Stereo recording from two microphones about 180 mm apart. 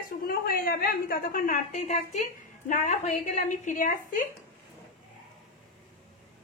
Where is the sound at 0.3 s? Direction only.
55° left (ahead or behind).